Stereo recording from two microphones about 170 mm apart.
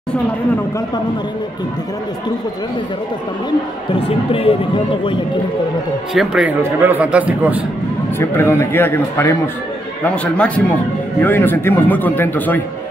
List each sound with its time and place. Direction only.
4.3 s speech: 35° left (ahead or behind)
6.1 s a man's voice: 5° right (ahead or behind)
8.2 s speech: 15° left (ahead or behind)